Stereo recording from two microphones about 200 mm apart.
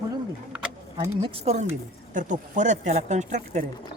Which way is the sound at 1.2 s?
30° right (ahead or behind).